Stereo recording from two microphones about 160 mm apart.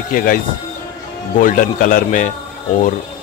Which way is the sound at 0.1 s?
60° left (ahead or behind).